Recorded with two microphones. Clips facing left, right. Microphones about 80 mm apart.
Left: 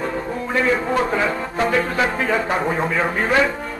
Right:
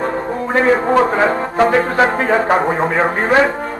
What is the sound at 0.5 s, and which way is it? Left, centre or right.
Speech, right.